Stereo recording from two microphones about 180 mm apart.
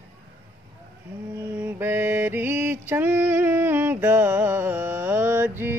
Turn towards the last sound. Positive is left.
turn(degrees=-10)  # may be behind; listen again after turning